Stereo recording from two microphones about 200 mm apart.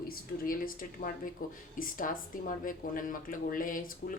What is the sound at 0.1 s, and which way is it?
Speech, 45° left (ahead or behind).